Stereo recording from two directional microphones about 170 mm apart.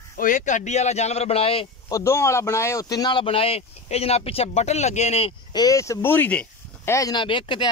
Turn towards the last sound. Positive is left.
turn(degrees=30)  # may be behind; listen again after turning